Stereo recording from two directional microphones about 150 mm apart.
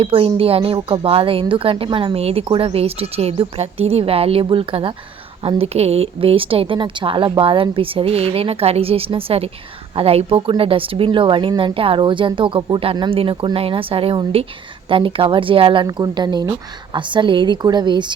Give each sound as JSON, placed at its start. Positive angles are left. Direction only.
{"t": 0.0, "sound": "speech", "side_deg": -40}